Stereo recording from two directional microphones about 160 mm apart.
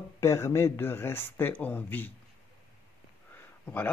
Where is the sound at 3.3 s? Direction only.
10° left (ahead or behind).